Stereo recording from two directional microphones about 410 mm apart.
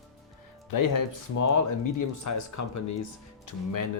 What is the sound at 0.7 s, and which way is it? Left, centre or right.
Speech, left.